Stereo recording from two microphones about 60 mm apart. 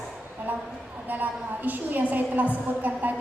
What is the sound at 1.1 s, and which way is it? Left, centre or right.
A woman's voice, right.